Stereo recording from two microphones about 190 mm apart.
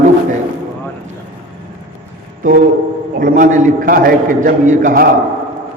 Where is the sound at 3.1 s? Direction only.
45° right (ahead or behind).